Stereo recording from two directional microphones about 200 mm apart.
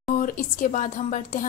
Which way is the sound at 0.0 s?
40° left (ahead or behind).